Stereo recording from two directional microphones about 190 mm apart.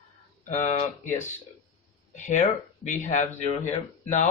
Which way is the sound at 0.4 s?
40° left (ahead or behind).